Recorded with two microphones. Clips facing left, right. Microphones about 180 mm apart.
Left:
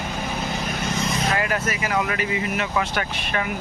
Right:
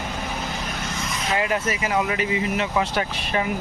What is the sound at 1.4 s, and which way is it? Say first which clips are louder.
Speech: right 1 dB; 20° right (ahead or behind).